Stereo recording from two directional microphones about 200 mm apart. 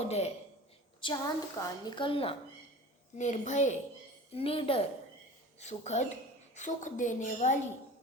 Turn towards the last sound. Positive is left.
turn(degrees=40)  # may be behind; listen again after turning